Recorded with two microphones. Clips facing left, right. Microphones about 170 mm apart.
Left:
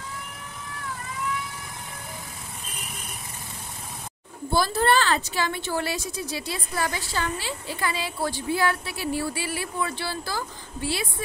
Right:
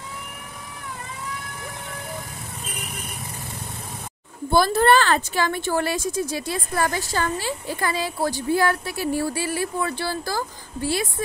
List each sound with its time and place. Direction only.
4.5 s a woman's voice: 55° right (ahead or behind)